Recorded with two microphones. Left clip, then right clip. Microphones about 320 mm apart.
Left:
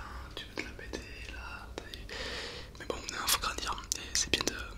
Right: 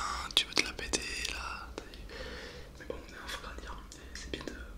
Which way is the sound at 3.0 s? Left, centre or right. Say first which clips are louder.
Left 10 dB; left.